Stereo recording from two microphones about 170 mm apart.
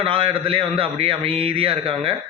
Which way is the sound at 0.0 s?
30° right (ahead or behind).